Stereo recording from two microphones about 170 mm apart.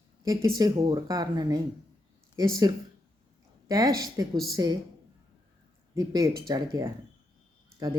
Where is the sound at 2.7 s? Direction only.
20° right (ahead or behind).